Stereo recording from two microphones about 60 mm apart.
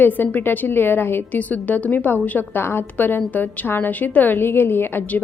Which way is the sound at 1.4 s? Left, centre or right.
Left.